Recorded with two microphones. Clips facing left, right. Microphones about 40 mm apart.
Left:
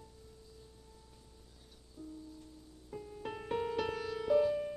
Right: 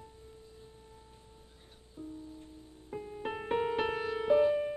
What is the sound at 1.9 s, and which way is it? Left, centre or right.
Music, right.